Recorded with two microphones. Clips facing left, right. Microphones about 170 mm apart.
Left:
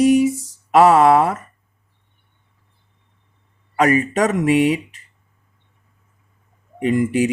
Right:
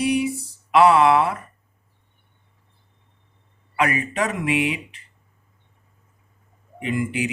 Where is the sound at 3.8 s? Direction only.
40° left (ahead or behind).